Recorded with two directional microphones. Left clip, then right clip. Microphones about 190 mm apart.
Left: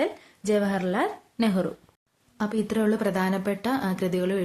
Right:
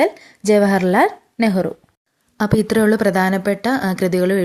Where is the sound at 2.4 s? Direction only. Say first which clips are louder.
Right 10 dB; 40° right (ahead or behind).